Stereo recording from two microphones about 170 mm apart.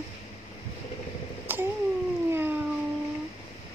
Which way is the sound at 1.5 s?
10° right (ahead or behind).